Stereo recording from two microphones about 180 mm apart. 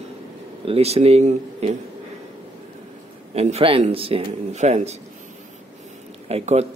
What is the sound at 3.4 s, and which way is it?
A man's voice, 35° right (ahead or behind).